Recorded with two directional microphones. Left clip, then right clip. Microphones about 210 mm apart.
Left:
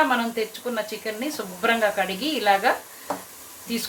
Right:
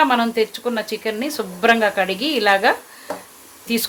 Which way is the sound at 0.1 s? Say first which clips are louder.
Right 6 dB; 50° right (ahead or behind).